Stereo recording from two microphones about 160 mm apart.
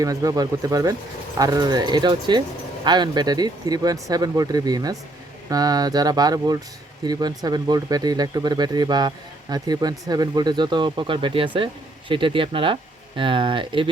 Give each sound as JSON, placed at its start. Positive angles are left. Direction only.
{"t": 0.0, "sound": "speech", "side_deg": -20}